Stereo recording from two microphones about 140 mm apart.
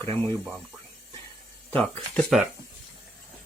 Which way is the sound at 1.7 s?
5° left (ahead or behind).